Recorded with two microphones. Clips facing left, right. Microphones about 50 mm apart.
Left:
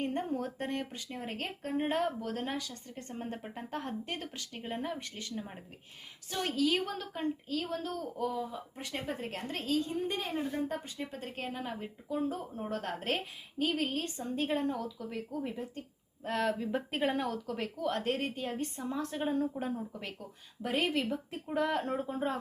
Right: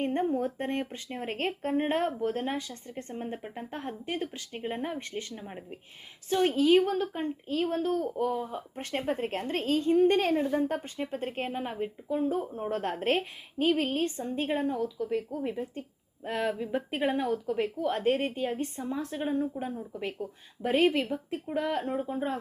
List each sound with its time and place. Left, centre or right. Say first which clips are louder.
0.0 s speech: right 6 dB; right; by 4.3 s centre
4.4 s speech: right 4 dB; right
5.4 s speech: right 1 dB; centre
6.3 s a woman's voice: right 8 dB; right
10.7 s a woman's voice: right 6 dB; right
14.4 s speech: right 3 dB; centre
20.1 s speech: right 8 dB; right
21.5 s speech: right 1 dB; centre